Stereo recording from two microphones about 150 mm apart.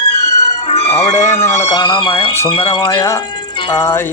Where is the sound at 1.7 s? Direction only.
30° left (ahead or behind).